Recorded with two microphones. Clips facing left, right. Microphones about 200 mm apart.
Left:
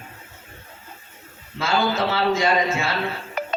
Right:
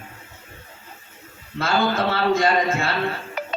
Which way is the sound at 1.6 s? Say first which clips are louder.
Right 1 dB; 55° right (ahead or behind).